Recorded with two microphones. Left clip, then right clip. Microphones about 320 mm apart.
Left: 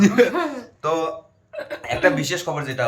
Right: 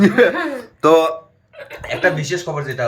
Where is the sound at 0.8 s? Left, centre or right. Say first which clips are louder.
Right 10 dB; centre.